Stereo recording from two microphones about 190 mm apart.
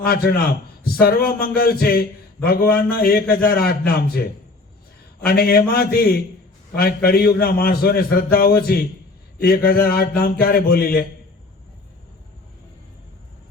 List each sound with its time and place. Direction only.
0.0 s a man's voice: 55° left (ahead or behind)
5.2 s a man's voice: 55° left (ahead or behind)